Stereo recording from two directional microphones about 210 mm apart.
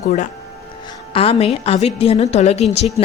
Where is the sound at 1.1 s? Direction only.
25° left (ahead or behind).